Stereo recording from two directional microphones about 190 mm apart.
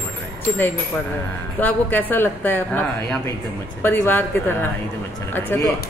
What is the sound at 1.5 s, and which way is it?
Speech, 10° left (ahead or behind).